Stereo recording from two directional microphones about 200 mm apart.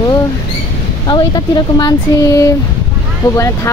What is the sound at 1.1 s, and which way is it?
Speech, 20° left (ahead or behind).